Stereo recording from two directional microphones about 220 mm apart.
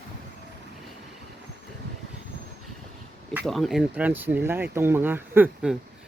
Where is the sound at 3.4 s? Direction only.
Centre (ahead or behind).